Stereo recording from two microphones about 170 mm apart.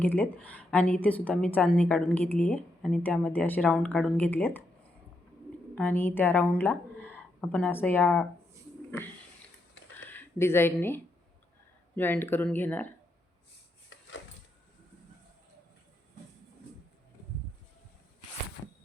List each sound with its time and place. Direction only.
0.0 s a woman's voice: 10° left (ahead or behind)
5.7 s a woman's voice: 10° left (ahead or behind)
10.1 s a woman's voice: 15° left (ahead or behind)
13.9 s a sound: 90° left